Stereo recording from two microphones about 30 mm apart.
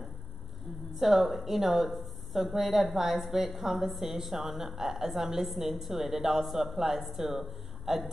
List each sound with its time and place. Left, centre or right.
0.9 s a woman's voice: centre